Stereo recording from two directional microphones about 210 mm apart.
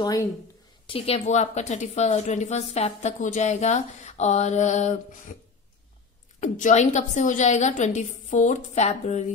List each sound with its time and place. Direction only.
0.0 s speech: 15° left (ahead or behind)
0.8 s speech: 25° left (ahead or behind)
6.4 s speech: 35° left (ahead or behind)